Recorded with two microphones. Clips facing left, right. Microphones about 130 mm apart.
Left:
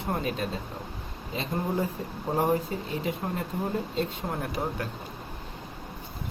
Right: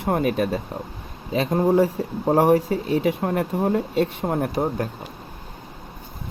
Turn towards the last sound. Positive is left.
turn(degrees=-45)  # may be behind; listen again after turning